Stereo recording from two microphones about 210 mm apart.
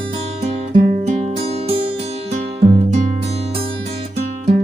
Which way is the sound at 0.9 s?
30° right (ahead or behind).